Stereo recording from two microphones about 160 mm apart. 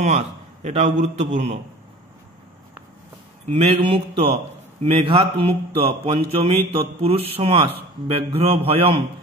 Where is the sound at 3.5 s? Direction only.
35° right (ahead or behind).